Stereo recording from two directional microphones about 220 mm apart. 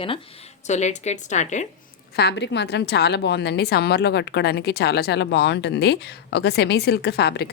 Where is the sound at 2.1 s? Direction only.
50° left (ahead or behind).